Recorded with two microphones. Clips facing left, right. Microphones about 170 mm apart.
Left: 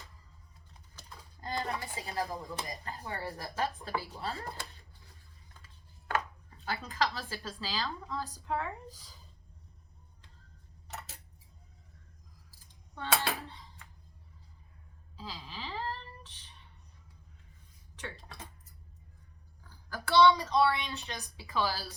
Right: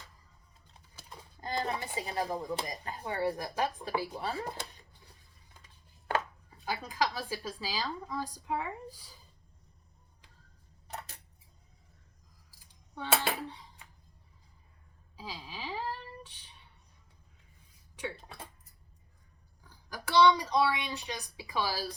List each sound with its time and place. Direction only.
1.1 s speech: 20° right (ahead or behind)
6.7 s a woman's voice: 10° right (ahead or behind)
13.0 s dishes: 15° right (ahead or behind)
15.1 s a sound: 10° right (ahead or behind)
19.9 s a woman's voice: 15° right (ahead or behind)